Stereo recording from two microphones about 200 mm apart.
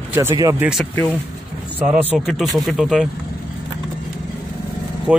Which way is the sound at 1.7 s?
10° right (ahead or behind).